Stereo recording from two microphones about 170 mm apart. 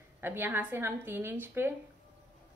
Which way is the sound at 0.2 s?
10° right (ahead or behind).